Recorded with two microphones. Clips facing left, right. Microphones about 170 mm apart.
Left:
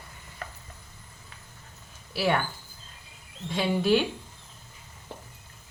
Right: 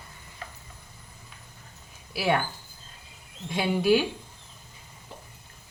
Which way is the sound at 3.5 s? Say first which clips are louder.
Right 1 dB; 10° right (ahead or behind).